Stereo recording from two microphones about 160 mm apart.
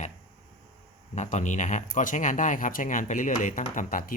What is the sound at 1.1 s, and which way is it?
Speech, 50° left (ahead or behind).